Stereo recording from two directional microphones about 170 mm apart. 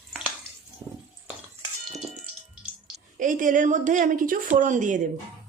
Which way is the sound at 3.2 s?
50° right (ahead or behind).